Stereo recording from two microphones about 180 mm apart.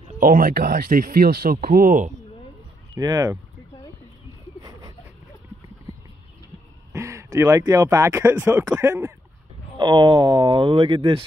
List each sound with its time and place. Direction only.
0.2 s speech: 50° right (ahead or behind)
2.9 s speech: 20° right (ahead or behind)
6.9 s speech: 15° right (ahead or behind)
9.8 s speech: 25° right (ahead or behind)